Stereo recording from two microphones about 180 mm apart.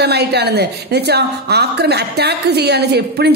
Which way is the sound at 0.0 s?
65° right (ahead or behind).